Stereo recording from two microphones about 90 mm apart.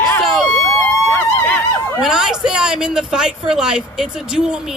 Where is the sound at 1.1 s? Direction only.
20° left (ahead or behind).